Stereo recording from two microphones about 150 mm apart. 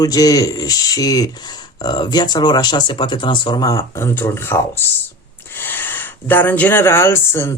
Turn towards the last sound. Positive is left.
turn(degrees=15)  # may be behind; listen again after turning